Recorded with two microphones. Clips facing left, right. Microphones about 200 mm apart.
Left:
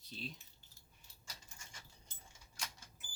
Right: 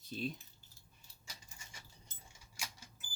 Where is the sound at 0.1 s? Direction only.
50° right (ahead or behind).